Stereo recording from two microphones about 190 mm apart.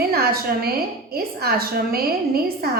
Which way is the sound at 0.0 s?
50° right (ahead or behind).